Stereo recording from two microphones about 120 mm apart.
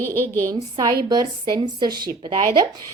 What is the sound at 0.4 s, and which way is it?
A woman's voice, 30° right (ahead or behind).